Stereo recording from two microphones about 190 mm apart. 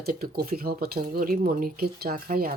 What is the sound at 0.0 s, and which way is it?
Speech, 55° right (ahead or behind).